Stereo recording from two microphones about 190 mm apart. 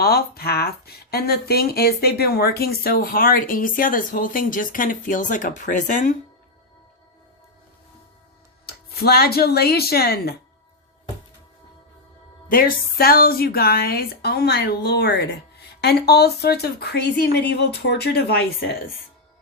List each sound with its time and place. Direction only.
0.0 s speech: 55° left (ahead or behind)
8.6 s speech: 55° left (ahead or behind)
12.5 s speech: 50° left (ahead or behind)